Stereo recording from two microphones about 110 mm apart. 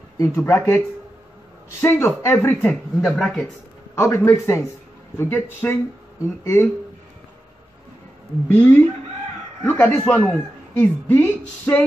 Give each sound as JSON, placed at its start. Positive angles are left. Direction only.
{"t": 0.2, "sound": "speech", "side_deg": 25}
{"t": 2.7, "sound": "speech", "side_deg": 0}
{"t": 3.9, "sound": "speech", "side_deg": 25}
{"t": 8.5, "sound": "a woman's voice", "side_deg": 20}